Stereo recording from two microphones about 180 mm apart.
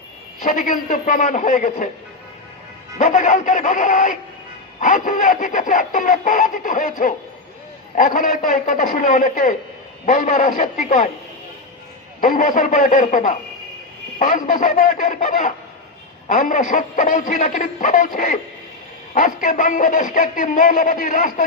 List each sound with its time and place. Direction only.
0.4 s a man's voice: 50° left (ahead or behind)
3.0 s a man's voice: 45° left (ahead or behind)
12.2 s a man's voice: 45° left (ahead or behind)